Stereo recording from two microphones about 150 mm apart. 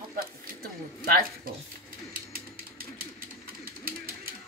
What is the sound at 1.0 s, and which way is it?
Speech, 75° right (ahead or behind).